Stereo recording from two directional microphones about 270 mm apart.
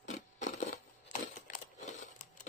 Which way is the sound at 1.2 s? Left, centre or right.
Left.